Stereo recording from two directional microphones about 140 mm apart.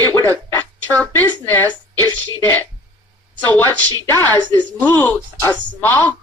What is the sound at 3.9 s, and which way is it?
Speech, 25° right (ahead or behind).